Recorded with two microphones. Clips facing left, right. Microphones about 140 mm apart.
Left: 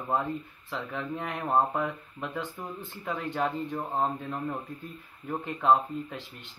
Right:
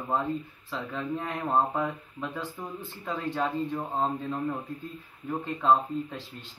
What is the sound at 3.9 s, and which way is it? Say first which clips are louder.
Speech: left 1 dB; 10° left (ahead or behind).